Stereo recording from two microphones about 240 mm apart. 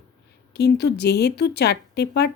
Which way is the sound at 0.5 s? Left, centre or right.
Left.